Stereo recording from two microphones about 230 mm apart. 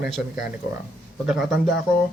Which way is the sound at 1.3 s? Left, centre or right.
Centre.